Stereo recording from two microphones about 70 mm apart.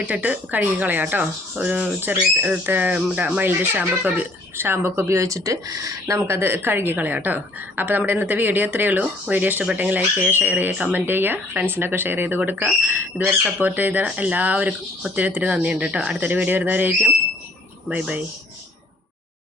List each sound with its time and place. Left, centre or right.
0.0 s speech: right